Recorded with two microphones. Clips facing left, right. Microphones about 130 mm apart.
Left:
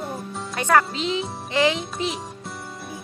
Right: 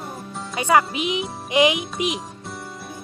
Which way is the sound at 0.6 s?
10° right (ahead or behind).